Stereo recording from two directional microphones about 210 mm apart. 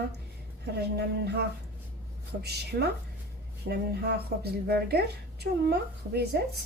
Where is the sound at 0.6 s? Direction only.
50° right (ahead or behind).